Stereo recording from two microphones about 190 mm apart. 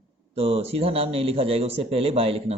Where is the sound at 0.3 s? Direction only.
30° right (ahead or behind).